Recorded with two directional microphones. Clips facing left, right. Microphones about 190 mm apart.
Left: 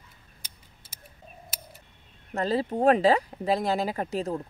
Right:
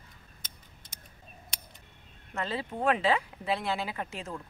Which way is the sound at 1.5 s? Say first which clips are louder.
Left 3 dB; 5° left (ahead or behind).